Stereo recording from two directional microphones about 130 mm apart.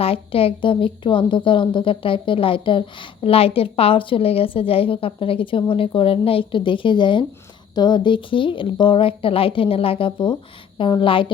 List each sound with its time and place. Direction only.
0.0 s a woman's voice: 45° left (ahead or behind)